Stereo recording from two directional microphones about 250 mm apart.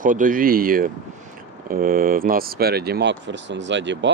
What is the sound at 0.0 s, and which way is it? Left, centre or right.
Speech, right.